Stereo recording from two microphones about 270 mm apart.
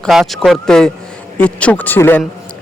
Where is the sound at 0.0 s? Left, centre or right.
Centre.